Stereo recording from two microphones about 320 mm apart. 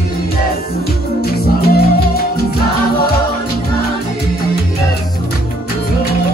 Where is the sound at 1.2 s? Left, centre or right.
Left.